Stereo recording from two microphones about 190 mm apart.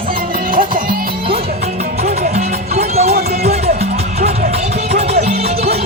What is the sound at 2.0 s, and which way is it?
Music, 35° right (ahead or behind).